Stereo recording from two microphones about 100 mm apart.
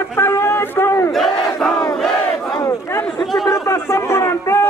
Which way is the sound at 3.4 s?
30° left (ahead or behind).